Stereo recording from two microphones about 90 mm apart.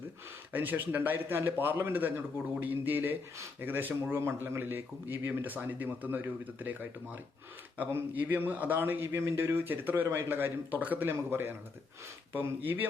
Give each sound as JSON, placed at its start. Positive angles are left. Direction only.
{"t": 0.5, "sound": "a man's voice", "side_deg": -20}